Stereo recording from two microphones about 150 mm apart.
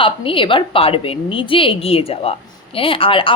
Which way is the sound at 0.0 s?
35° left (ahead or behind).